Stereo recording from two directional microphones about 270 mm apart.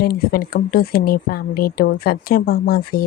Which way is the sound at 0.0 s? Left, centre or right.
Left.